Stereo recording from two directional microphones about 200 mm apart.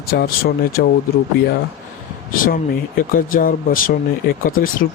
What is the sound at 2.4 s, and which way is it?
Speech, 45° left (ahead or behind).